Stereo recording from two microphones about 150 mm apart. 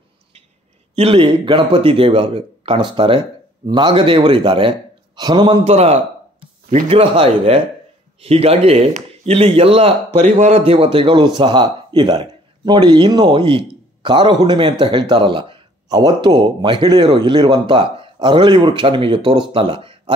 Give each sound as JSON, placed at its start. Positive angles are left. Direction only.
{"t": 0.9, "sound": "speech", "side_deg": -40}